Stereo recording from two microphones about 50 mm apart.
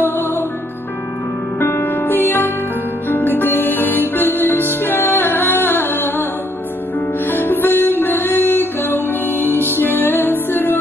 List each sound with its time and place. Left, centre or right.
0.0 s music: left
1.8 s music: left
7.2 s music: left